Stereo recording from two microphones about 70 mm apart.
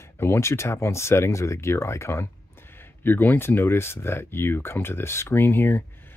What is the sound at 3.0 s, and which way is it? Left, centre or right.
Speech, left.